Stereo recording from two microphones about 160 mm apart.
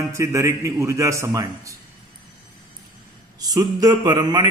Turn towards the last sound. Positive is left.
turn(degrees=-25)  # may be behind; listen again after turning